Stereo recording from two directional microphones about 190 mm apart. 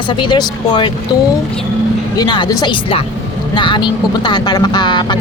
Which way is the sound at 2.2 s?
20° left (ahead or behind).